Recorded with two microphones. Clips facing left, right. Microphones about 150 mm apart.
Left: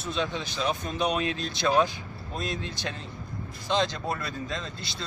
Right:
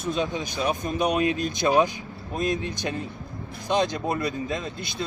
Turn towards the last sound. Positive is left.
turn(degrees=-15)  # may be behind; listen again after turning